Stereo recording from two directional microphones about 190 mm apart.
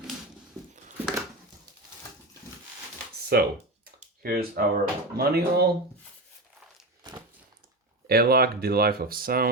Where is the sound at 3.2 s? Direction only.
55° right (ahead or behind).